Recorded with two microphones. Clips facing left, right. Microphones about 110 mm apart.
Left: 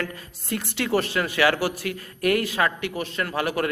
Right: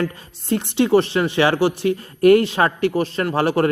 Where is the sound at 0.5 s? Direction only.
25° right (ahead or behind).